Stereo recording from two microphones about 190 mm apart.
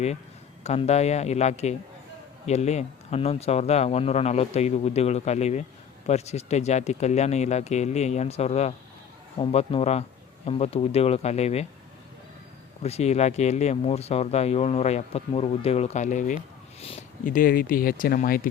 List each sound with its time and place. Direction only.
0.6 s speech: 35° left (ahead or behind)
12.8 s speech: 35° left (ahead or behind)